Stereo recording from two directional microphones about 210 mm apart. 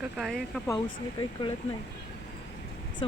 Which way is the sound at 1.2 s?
20° left (ahead or behind).